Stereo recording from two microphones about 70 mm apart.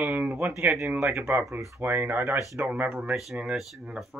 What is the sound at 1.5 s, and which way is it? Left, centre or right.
Speech, right.